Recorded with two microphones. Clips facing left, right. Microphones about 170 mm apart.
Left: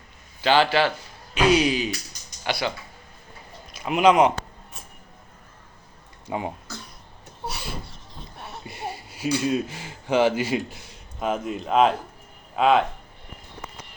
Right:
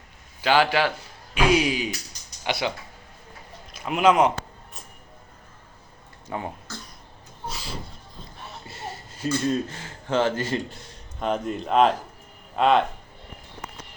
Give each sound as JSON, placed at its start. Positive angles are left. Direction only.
{"t": 0.4, "sound": "speech", "side_deg": -10}
{"t": 3.7, "sound": "speech", "side_deg": 0}
{"t": 6.2, "sound": "speech", "side_deg": 15}
{"t": 7.4, "sound": "a sound", "side_deg": 65}
{"t": 8.6, "sound": "speech", "side_deg": 15}